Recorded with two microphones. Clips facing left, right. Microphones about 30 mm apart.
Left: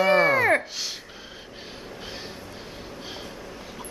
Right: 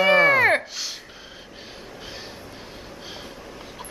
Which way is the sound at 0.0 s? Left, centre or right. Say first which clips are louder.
Right 3 dB; centre.